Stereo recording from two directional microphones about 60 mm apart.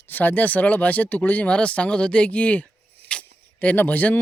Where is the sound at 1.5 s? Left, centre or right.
Centre.